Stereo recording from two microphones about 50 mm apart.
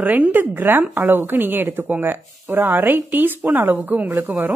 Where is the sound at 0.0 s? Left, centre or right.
Right.